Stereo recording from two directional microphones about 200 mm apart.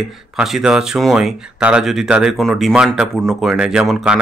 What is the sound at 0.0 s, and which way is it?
Speech, centre (ahead or behind).